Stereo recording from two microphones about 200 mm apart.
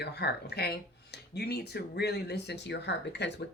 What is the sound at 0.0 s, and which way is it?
Speech, 55° left (ahead or behind).